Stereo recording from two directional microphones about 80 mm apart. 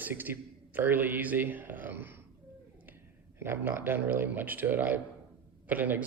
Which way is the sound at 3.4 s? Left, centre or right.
Right.